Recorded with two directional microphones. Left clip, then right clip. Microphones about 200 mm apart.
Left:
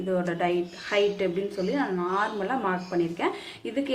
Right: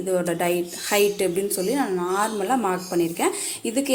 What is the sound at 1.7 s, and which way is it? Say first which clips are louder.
Speech: right 2 dB; 35° right (ahead or behind).